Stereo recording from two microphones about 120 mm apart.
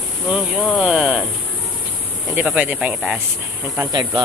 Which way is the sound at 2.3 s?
10° right (ahead or behind).